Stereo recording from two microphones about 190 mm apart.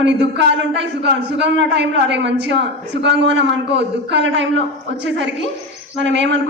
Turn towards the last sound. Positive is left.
turn(degrees=-75)  # may be behind; listen again after turning